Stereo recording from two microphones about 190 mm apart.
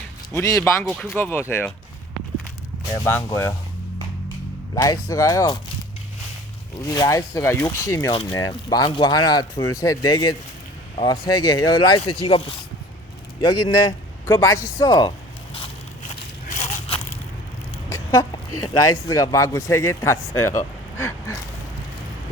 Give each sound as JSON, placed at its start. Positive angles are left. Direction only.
{"t": 0.3, "sound": "a man's voice", "side_deg": 15}
{"t": 0.9, "sound": "speech", "side_deg": 0}
{"t": 1.1, "sound": "a man's voice", "side_deg": 10}
{"t": 3.0, "sound": "a man's voice", "side_deg": 10}
{"t": 4.7, "sound": "a man's voice", "side_deg": 20}
{"t": 6.8, "sound": "a man's voice", "side_deg": 20}
{"t": 15.5, "sound": "a sound", "side_deg": 30}
{"t": 17.8, "sound": "speech", "side_deg": 15}